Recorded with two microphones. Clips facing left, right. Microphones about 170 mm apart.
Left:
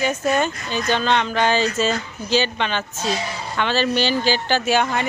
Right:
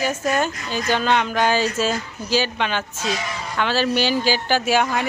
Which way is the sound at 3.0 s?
30° left (ahead or behind).